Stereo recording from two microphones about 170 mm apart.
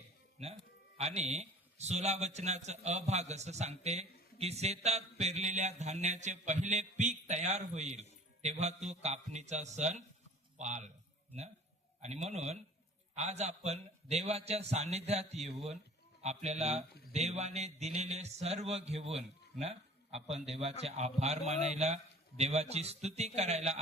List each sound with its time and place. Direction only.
0.9 s a man's voice: 40° right (ahead or behind)
12.0 s a man's voice: 40° right (ahead or behind)